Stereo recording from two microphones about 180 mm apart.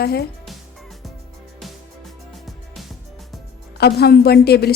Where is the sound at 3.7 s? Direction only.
60° left (ahead or behind).